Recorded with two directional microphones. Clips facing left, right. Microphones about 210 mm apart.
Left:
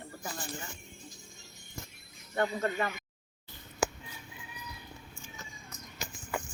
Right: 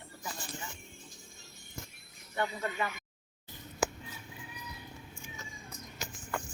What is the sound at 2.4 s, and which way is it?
Speech, 45° left (ahead or behind).